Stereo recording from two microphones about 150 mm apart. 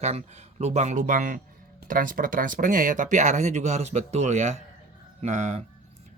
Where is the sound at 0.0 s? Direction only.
45° right (ahead or behind).